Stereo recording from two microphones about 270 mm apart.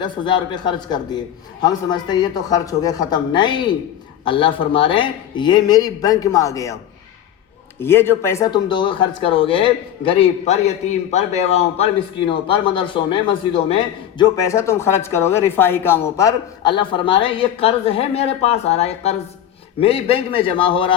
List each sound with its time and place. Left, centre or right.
0.0 s speech: centre
7.8 s speech: centre